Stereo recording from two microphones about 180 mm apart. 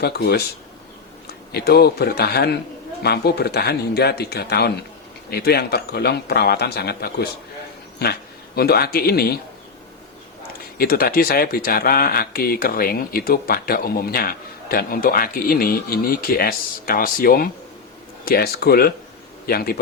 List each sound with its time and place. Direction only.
0.0 s speech: 65° left (ahead or behind)
1.5 s speech: 60° left (ahead or behind)
10.8 s speech: 55° left (ahead or behind)